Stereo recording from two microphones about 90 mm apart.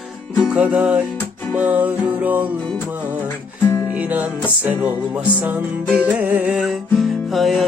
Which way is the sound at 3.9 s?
15° right (ahead or behind).